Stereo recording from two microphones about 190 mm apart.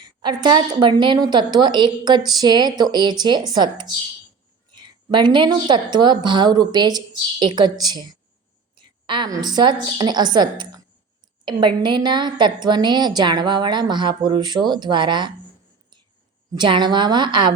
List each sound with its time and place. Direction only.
0.0 s a woman's voice: 25° right (ahead or behind)
16.6 s a woman's voice: 25° right (ahead or behind)